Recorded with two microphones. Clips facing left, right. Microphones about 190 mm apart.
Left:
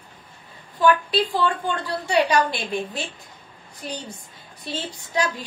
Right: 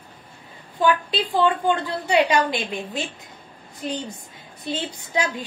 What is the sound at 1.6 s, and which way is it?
A woman's voice, 20° right (ahead or behind).